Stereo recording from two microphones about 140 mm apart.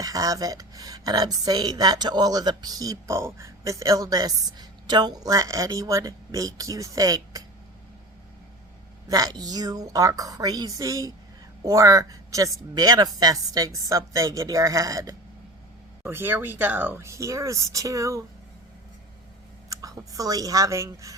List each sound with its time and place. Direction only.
0.0 s a woman's voice: 25° right (ahead or behind)
9.0 s a woman's voice: 25° right (ahead or behind)
19.7 s a woman's voice: 25° right (ahead or behind)